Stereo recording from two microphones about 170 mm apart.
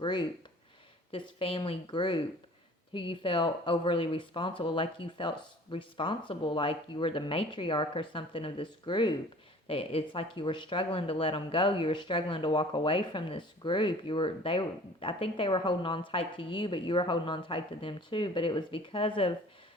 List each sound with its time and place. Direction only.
0.0 s speech: 25° left (ahead or behind)